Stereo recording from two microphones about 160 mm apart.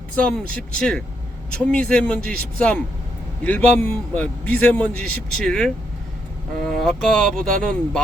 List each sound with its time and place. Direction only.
0.2 s a man's voice: 5° left (ahead or behind)